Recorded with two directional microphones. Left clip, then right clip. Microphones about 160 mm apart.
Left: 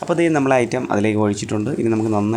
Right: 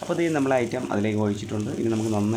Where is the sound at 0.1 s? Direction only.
25° left (ahead or behind).